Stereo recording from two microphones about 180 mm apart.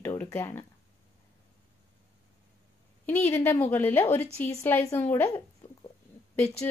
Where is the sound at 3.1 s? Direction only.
15° left (ahead or behind).